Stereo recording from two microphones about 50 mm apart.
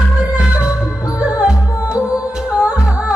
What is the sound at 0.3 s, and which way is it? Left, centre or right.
Music, right.